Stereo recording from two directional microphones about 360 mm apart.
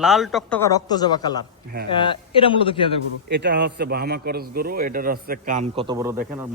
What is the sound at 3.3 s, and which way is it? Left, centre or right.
A man's voice, right.